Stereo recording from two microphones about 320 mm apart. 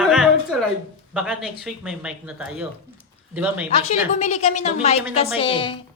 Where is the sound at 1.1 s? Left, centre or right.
Centre.